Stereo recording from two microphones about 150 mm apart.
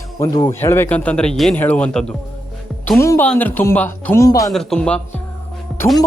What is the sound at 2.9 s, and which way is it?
Speech, 20° left (ahead or behind).